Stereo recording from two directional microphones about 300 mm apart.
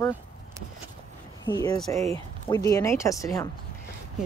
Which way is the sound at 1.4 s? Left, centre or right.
Centre.